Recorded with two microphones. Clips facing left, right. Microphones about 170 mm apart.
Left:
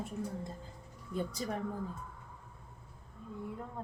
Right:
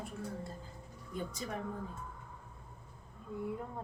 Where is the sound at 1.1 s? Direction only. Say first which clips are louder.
Left 4 dB; 35° left (ahead or behind).